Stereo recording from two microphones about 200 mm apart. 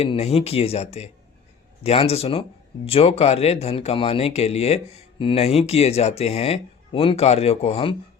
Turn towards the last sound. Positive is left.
turn(degrees=30)  # may be behind; listen again after turning